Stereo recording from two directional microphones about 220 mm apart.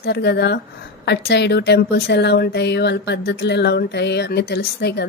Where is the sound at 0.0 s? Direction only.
50° left (ahead or behind).